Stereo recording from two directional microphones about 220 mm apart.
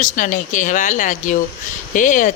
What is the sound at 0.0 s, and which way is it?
Speech, 35° left (ahead or behind).